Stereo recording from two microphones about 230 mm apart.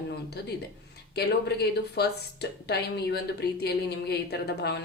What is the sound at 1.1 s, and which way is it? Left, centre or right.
Speech, left.